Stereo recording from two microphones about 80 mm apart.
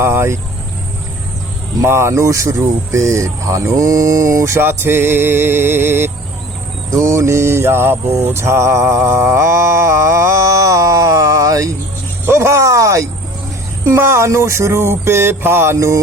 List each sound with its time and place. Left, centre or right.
0.0 s speech: right
1.8 s speech: right
6.9 s mantra: right
12.2 s speech: right